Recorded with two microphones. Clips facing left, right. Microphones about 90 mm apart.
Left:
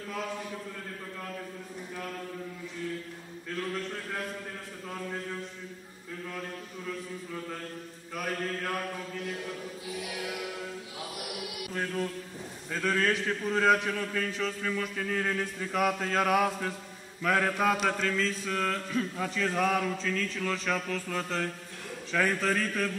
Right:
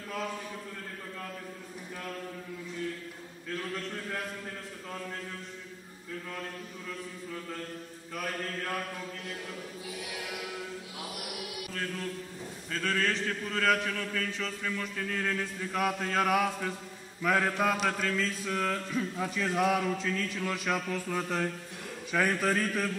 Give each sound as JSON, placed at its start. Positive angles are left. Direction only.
{"t": 11.7, "sound": "mantra", "side_deg": 20}
{"t": 12.7, "sound": "a man's voice", "side_deg": 15}
{"t": 17.2, "sound": "mantra", "side_deg": -5}
{"t": 22.1, "sound": "a man's voice", "side_deg": -10}